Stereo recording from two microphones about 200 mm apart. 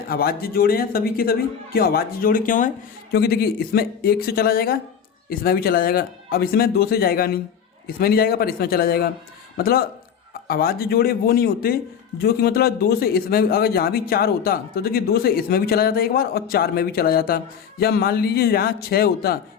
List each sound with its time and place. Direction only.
0.1 s speech: 50° left (ahead or behind)